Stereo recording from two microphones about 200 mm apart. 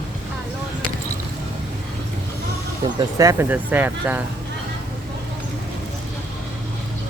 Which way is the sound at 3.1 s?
15° right (ahead or behind).